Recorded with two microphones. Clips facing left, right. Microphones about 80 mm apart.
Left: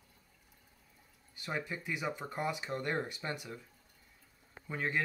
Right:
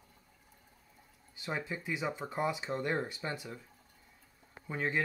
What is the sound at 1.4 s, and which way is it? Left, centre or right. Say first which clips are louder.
Speech: right 1 dB; centre.